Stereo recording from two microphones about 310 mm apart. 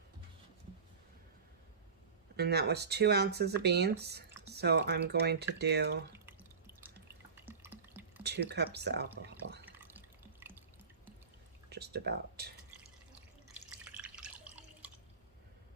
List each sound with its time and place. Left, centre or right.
2.3 s speech: right
7.4 s water: centre
8.2 s speech: right
9.6 s water: centre
11.7 s speech: right
13.9 s drip: centre